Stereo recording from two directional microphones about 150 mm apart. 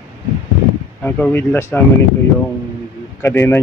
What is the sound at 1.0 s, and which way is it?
Speech, 10° left (ahead or behind).